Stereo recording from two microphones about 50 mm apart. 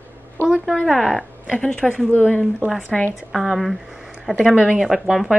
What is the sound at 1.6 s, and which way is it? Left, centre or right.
Speech, centre.